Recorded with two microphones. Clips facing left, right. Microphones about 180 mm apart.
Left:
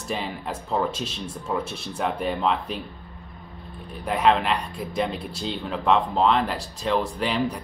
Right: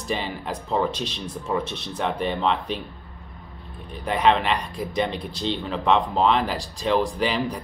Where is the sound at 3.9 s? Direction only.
Centre (ahead or behind).